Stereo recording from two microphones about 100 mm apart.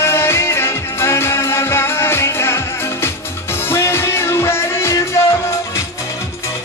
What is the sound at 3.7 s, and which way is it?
Music, 25° left (ahead or behind).